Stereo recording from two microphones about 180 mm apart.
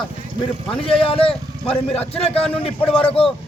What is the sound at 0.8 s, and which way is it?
A man's voice, 30° left (ahead or behind).